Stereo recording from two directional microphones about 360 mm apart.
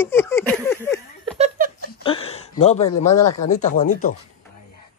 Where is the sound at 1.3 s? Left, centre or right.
Right.